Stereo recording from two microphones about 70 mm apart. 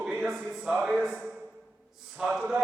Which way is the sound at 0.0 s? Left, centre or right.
Centre.